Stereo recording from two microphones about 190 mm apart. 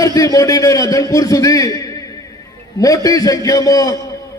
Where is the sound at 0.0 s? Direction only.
20° left (ahead or behind).